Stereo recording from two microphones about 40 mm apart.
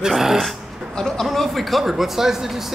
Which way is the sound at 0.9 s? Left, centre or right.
Centre.